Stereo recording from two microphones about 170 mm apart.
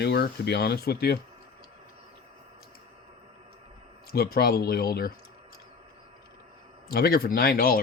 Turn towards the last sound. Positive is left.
turn(degrees=60)  # may be behind; listen again after turning